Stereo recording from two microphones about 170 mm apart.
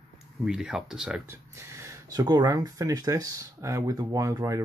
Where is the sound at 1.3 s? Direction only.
15° right (ahead or behind).